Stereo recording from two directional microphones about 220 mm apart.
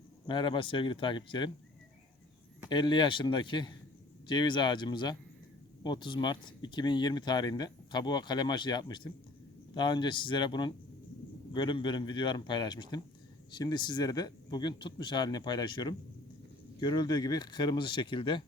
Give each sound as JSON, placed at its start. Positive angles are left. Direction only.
{"t": 0.3, "sound": "speech", "side_deg": 20}
{"t": 2.6, "sound": "speech", "side_deg": 20}